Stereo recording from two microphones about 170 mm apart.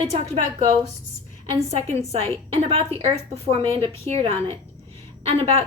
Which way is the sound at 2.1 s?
35° right (ahead or behind).